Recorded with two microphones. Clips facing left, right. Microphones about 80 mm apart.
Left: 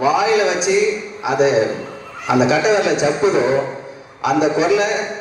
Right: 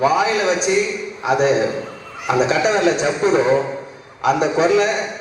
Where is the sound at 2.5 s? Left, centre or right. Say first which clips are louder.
Left 1 dB; right.